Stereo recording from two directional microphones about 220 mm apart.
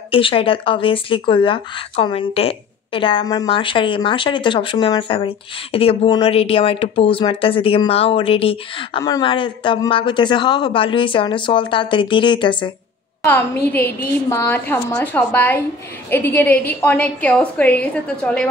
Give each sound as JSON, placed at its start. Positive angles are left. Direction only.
{"t": 0.1, "sound": "speech", "side_deg": 25}
{"t": 14.3, "sound": "a woman's voice", "side_deg": 10}